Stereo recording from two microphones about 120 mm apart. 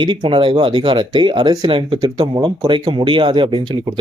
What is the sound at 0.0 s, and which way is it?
Speech, 40° right (ahead or behind).